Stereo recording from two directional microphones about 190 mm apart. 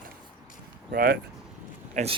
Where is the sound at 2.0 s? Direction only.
40° right (ahead or behind).